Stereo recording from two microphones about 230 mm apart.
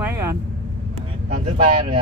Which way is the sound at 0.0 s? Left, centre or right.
Centre.